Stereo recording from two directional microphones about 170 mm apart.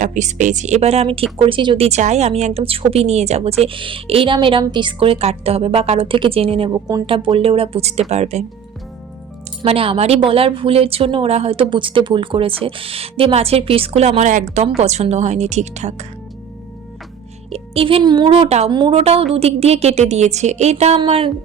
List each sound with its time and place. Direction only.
0.0 s a woman's voice: 45° right (ahead or behind); by 1.9 s 30° right (ahead or behind)
1.9 s a woman's voice: 40° right (ahead or behind)
9.6 s a woman's voice: 35° right (ahead or behind)
17.5 s a woman's voice: 35° right (ahead or behind)